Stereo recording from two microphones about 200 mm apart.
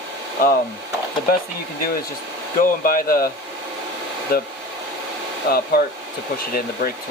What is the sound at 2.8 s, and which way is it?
Speech, 45° left (ahead or behind).